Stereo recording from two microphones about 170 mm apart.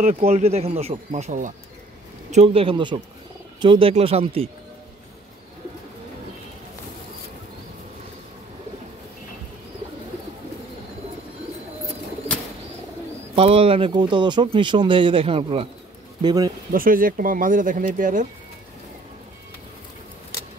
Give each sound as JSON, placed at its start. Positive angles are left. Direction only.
{"t": 0.0, "sound": "speech", "side_deg": -40}
{"t": 13.3, "sound": "speech", "side_deg": -35}
{"t": 16.2, "sound": "speech", "side_deg": -25}
{"t": 16.7, "sound": "speech", "side_deg": -55}